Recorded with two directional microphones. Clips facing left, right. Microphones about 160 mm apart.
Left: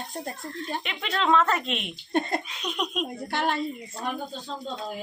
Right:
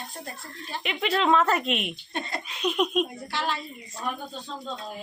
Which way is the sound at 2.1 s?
50° left (ahead or behind).